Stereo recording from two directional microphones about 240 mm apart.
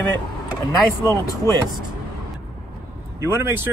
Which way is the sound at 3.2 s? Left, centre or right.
Centre.